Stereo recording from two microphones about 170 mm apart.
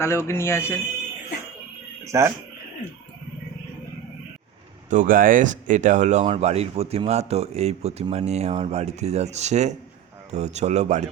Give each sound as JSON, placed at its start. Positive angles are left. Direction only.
{"t": 0.0, "sound": "speech", "side_deg": 15}
{"t": 2.0, "sound": "speech", "side_deg": -15}
{"t": 4.9, "sound": "speech", "side_deg": -50}